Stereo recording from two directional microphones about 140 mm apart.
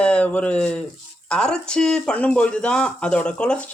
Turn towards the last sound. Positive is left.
turn(degrees=10)  # may be behind; listen again after turning